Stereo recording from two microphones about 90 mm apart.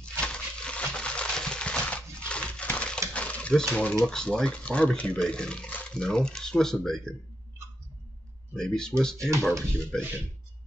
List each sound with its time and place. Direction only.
0.0 s a sound: 10° left (ahead or behind)
4.0 s speech: 10° left (ahead or behind)
8.5 s speech: 10° left (ahead or behind)
9.9 s speech: 25° right (ahead or behind)